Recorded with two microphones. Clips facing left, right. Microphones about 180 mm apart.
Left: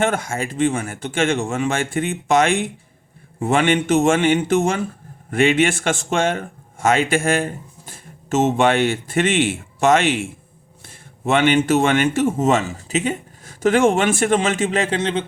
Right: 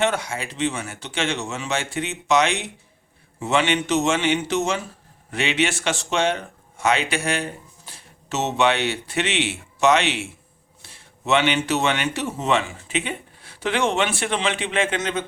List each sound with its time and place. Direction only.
0.0 s speech: 50° left (ahead or behind); by 15.2 s 30° left (ahead or behind)